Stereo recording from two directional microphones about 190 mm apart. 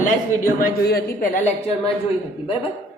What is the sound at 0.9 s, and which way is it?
A woman's voice, 55° left (ahead or behind).